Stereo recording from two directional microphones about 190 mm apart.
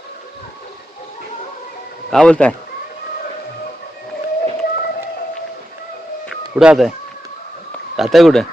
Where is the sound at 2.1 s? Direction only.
5° left (ahead or behind).